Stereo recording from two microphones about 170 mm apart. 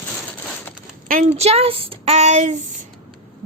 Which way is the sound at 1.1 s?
45° right (ahead or behind).